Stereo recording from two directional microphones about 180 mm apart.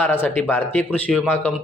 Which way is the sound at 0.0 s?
10° left (ahead or behind).